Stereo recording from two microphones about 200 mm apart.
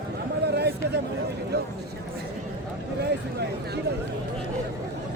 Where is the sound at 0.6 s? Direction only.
55° right (ahead or behind).